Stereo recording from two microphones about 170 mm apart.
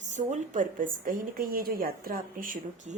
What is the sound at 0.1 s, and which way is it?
A woman's voice, 45° right (ahead or behind).